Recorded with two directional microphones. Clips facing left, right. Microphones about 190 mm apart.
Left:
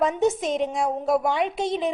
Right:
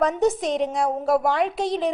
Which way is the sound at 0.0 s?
Centre (ahead or behind).